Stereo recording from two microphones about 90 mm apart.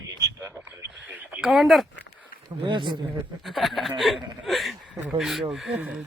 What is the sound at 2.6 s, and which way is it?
Speech, 60° right (ahead or behind).